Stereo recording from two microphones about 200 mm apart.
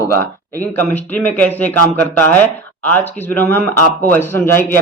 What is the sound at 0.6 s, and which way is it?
Speech, 10° left (ahead or behind).